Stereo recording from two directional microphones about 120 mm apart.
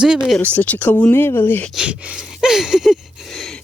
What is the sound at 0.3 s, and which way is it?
Speech, 10° left (ahead or behind).